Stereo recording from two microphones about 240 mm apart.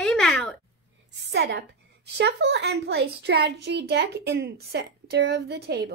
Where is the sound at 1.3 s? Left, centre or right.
Right.